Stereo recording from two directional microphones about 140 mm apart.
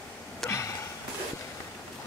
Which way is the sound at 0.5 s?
20° left (ahead or behind).